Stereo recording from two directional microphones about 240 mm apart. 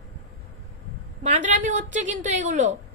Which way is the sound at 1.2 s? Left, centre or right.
Right.